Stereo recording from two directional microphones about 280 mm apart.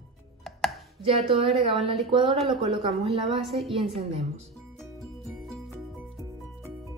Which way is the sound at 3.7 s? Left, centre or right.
Right.